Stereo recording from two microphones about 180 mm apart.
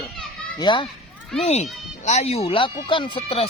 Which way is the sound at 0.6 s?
25° left (ahead or behind).